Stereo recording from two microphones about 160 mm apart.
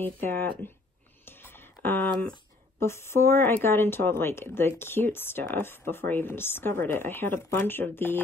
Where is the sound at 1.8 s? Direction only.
10° left (ahead or behind).